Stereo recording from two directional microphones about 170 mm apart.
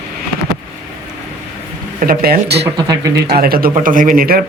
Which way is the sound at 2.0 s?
60° right (ahead or behind).